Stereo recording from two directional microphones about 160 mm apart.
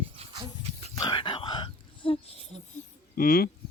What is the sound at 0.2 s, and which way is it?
Dog, 40° right (ahead or behind).